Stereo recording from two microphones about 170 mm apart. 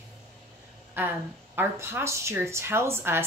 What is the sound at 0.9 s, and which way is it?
A woman's voice, 10° right (ahead or behind).